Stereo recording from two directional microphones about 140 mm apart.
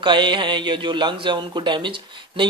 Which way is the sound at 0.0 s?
35° right (ahead or behind).